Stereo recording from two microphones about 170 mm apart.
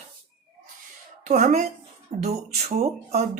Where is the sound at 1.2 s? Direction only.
45° right (ahead or behind).